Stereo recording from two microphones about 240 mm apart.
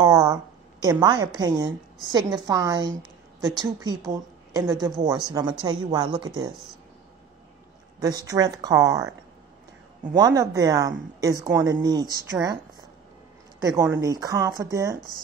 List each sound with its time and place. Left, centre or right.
0.0 s a woman's voice: centre
8.0 s speech: centre
10.1 s speech: centre
13.6 s speech: centre